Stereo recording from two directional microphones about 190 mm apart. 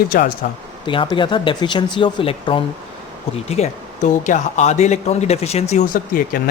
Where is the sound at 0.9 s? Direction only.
25° left (ahead or behind).